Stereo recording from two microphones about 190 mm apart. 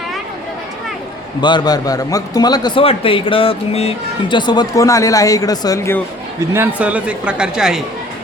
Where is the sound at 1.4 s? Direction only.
20° left (ahead or behind).